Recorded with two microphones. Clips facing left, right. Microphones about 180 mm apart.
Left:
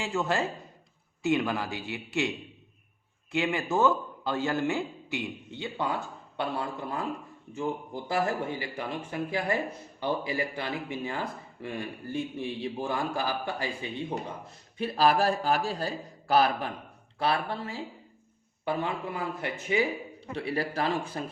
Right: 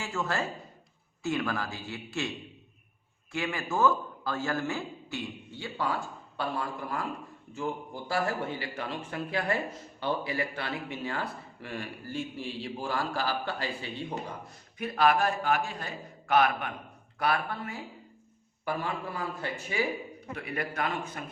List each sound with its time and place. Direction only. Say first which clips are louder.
0.0 s a man's voice: left 3 dB; 20° left (ahead or behind)
3.3 s a man's voice: left 4 dB; 20° left (ahead or behind)
14.8 s a man's voice: left 1 dB; 30° left (ahead or behind)
20.3 s a man's voice: left 4 dB; 30° left (ahead or behind)